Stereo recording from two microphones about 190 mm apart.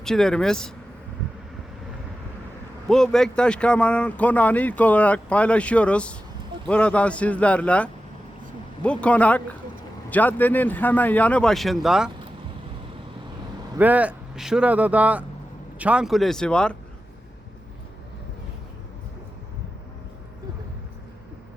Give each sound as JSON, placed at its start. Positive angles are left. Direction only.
{"t": 0.0, "sound": "speech", "side_deg": 5}
{"t": 2.9, "sound": "speech", "side_deg": 0}
{"t": 13.7, "sound": "speech", "side_deg": -10}